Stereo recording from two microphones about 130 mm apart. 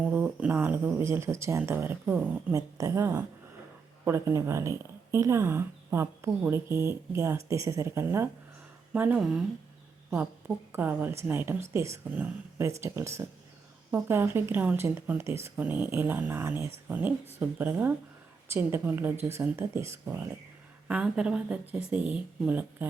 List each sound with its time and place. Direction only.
0.0 s speech: 10° right (ahead or behind)
2.5 s speech: 25° right (ahead or behind); by 9.4 s 5° right (ahead or behind)
10.7 s speech: 15° right (ahead or behind)